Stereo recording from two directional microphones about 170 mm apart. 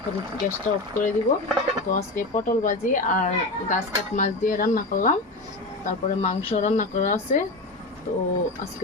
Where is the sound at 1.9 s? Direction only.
50° left (ahead or behind).